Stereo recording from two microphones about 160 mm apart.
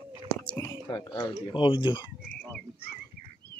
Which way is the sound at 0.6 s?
25° left (ahead or behind).